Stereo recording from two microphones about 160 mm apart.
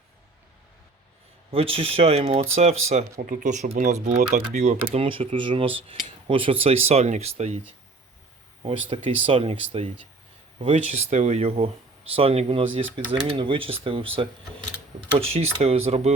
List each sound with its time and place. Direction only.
1.5 s speech: 35° right (ahead or behind)
4.9 s speech: 35° right (ahead or behind)
8.6 s speech: 35° right (ahead or behind)
10.7 s speech: 40° right (ahead or behind)